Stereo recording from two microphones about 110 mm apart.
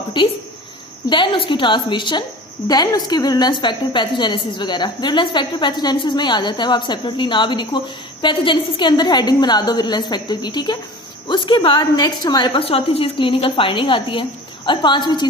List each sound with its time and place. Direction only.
0.2 s a woman's voice: 50° left (ahead or behind)
12.5 s a woman's voice: 60° left (ahead or behind); by 15.3 s 40° left (ahead or behind)